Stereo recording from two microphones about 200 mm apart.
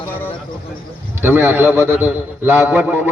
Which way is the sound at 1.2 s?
10° right (ahead or behind).